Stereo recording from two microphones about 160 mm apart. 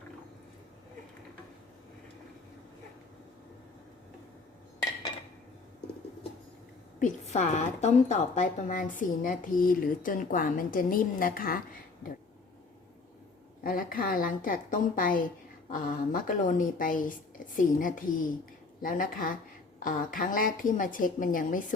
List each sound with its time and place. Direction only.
7.0 s a woman's voice: 50° left (ahead or behind)
13.7 s a woman's voice: 65° left (ahead or behind)